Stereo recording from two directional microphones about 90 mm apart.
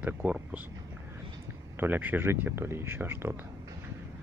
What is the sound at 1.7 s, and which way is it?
Speech, 20° right (ahead or behind).